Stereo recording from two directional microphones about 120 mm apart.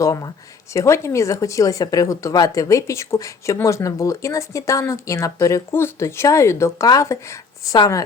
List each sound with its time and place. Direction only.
0.0 s speech: 30° left (ahead or behind)